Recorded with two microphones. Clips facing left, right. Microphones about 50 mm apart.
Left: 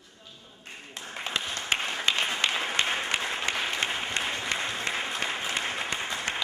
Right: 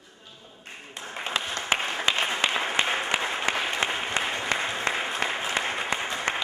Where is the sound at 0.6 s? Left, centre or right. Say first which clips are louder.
Right 2 dB; centre.